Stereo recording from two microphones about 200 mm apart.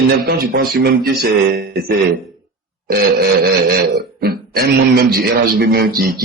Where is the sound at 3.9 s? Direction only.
50° right (ahead or behind).